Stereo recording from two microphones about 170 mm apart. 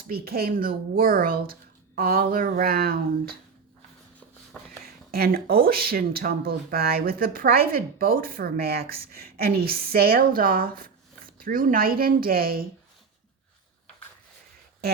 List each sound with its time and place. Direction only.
0.1 s speech: 65° right (ahead or behind)
5.1 s speech: 65° right (ahead or behind)